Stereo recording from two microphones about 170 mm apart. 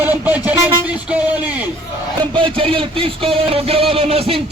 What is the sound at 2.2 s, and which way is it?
Music, 30° right (ahead or behind).